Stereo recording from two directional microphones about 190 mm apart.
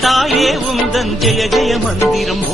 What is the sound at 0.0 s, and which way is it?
Music, centre (ahead or behind).